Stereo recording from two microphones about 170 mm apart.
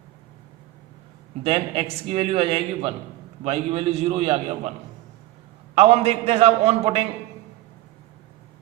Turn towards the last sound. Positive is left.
turn(degrees=-40)  # may be behind; listen again after turning